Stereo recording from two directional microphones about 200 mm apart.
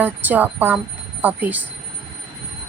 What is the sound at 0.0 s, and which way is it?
Speech, 10° right (ahead or behind).